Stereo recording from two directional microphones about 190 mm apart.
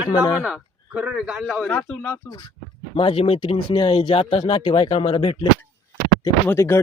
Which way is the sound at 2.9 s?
30° left (ahead or behind).